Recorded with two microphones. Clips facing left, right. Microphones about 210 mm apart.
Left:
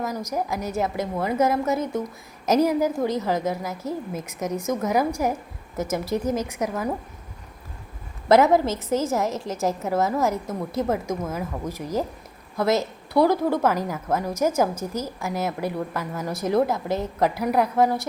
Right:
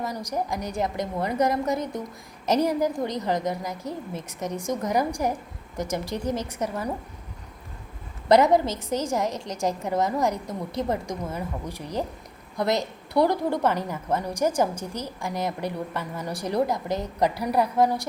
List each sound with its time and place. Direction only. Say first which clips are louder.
0.3 s a woman's voice: left 1 dB; 5° left (ahead or behind)
8.3 s a woman's voice: left 1 dB; 5° left (ahead or behind)
13.1 s a woman's voice: left 3 dB; 20° right (ahead or behind)
13.6 s a woman's voice: left 2 dB; 5° left (ahead or behind)